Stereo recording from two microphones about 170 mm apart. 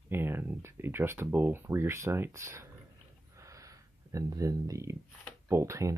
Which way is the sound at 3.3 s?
20° right (ahead or behind).